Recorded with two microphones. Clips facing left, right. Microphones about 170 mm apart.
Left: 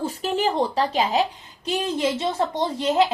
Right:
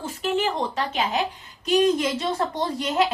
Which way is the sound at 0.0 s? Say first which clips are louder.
Left 1 dB; 35° left (ahead or behind).